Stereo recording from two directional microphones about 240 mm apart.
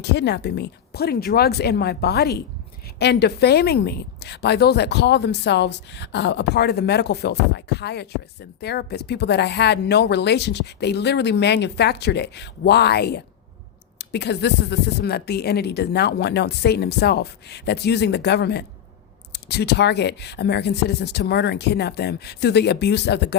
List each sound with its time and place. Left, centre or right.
0.0 s a woman's voice: left